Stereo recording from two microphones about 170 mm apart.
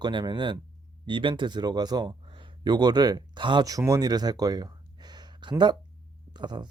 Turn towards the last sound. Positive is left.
turn(degrees=-25)  # may be behind; listen again after turning